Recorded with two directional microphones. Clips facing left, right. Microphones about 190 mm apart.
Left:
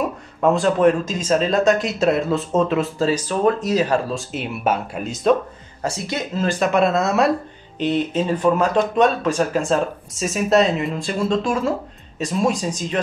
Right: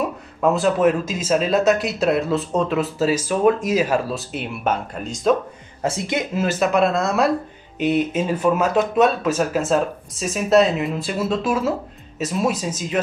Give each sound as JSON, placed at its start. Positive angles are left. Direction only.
{"t": 0.4, "sound": "speech", "side_deg": 0}
{"t": 5.8, "sound": "speech", "side_deg": -20}